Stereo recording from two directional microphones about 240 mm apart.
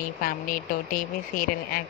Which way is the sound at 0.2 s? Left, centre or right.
Left.